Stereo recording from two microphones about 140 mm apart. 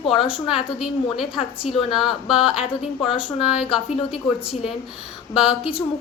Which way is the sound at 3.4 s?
5° right (ahead or behind).